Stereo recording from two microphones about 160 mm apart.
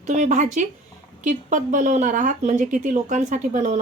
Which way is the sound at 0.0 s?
45° right (ahead or behind).